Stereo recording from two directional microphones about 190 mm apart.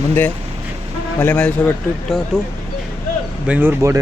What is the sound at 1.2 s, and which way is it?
A man's voice, 10° left (ahead or behind).